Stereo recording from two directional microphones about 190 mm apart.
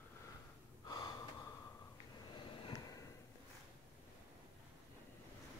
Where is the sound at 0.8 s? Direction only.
25° left (ahead or behind).